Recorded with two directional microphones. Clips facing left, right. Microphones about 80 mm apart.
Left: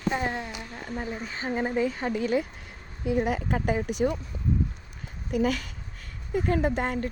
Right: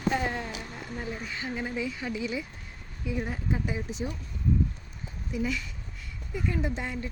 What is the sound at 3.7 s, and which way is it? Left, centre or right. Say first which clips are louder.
Speech: left 8 dB; left.